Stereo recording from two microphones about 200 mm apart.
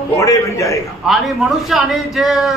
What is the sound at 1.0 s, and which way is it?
A man's voice, centre (ahead or behind).